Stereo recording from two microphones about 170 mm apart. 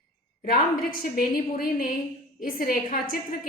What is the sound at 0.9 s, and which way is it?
A woman's voice, 60° left (ahead or behind).